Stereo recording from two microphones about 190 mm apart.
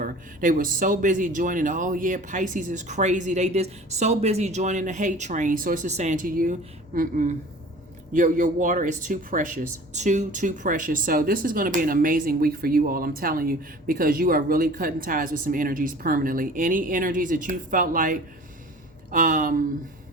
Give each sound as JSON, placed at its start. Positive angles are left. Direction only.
{"t": 0.0, "sound": "speech", "side_deg": -45}